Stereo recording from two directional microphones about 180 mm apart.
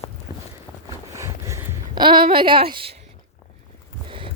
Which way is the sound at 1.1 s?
15° right (ahead or behind).